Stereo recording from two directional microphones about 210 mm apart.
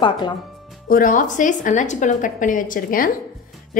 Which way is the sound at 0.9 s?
40° left (ahead or behind).